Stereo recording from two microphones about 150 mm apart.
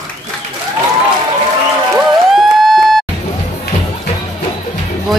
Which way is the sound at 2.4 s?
Centre (ahead or behind).